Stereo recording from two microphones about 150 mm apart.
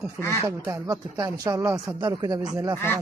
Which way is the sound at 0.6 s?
20° right (ahead or behind).